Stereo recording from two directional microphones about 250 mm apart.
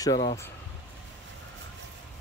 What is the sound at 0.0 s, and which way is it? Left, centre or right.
Speech, centre.